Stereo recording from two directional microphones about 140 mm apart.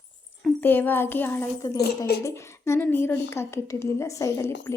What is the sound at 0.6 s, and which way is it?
A woman's voice, 15° left (ahead or behind).